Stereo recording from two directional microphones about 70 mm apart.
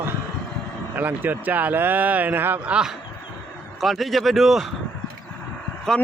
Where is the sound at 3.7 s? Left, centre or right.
Centre.